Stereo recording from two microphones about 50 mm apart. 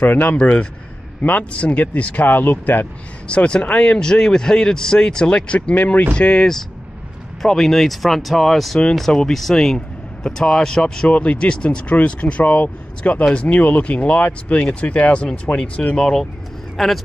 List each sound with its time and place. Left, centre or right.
0.0 s speech: left
0.4 s speech: left
2.2 s speech: left
3.3 s speech: left
7.4 s speech: centre
16.0 s speech: centre